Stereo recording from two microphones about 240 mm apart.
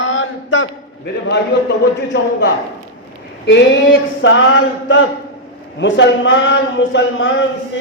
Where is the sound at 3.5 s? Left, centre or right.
Left.